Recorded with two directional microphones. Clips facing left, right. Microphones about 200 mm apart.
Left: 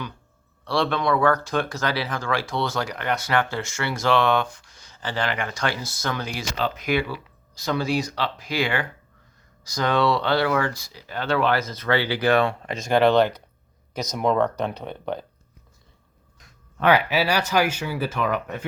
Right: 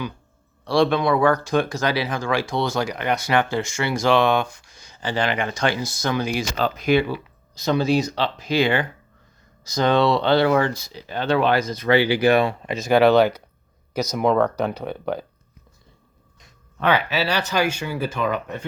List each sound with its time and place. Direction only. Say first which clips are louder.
0.6 s speech: right 5 dB; 15° right (ahead or behind)
6.6 s speech: even; 45° right (ahead or behind)
6.8 s speech: right 9 dB; 25° right (ahead or behind); by 15.2 s 5° right (ahead or behind)
16.9 s speech: left 1 dB; 10° left (ahead or behind)